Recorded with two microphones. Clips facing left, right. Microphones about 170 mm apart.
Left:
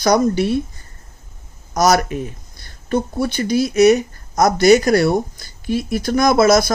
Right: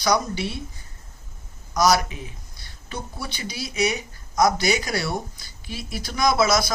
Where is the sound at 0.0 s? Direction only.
50° left (ahead or behind).